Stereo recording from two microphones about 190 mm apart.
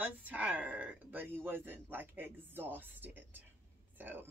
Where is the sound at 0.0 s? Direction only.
10° right (ahead or behind).